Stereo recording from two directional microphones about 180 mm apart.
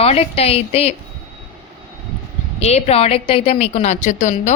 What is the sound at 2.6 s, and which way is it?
A woman's voice, 35° left (ahead or behind).